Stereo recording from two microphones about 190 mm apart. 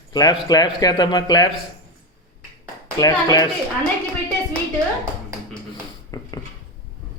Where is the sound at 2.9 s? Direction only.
20° left (ahead or behind).